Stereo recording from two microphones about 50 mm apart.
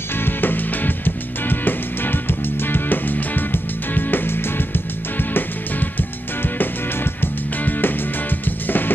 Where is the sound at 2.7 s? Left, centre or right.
Left.